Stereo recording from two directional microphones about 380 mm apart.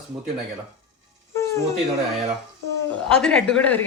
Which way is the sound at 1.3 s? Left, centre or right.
Centre.